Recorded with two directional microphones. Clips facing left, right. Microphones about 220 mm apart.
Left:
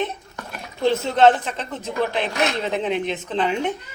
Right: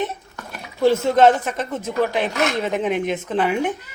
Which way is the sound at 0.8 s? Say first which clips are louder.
Right 3 dB; 10° right (ahead or behind).